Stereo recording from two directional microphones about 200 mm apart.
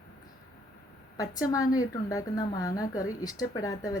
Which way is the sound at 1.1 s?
15° left (ahead or behind).